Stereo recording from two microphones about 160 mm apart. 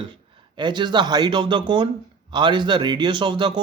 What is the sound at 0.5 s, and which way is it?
Speech, 30° right (ahead or behind).